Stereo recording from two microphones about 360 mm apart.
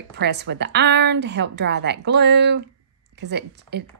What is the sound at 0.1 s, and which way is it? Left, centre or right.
Speech, right.